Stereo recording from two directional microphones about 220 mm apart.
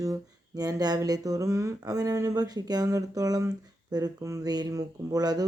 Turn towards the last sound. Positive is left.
turn(degrees=-15)  # may be behind; listen again after turning